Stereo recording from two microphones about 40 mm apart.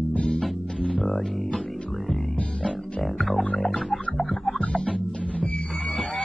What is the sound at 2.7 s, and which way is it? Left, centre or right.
Music, centre.